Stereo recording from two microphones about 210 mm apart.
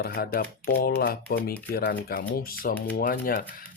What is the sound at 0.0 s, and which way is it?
Speech, 45° left (ahead or behind).